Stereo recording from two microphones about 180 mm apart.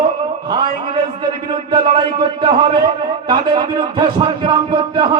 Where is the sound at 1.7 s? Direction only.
30° right (ahead or behind).